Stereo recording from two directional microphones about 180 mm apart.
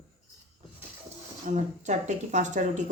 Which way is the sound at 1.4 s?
40° right (ahead or behind).